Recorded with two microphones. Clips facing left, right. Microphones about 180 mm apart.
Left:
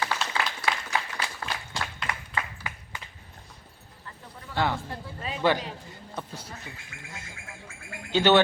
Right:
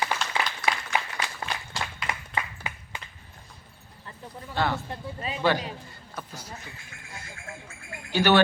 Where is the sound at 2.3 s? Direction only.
20° right (ahead or behind).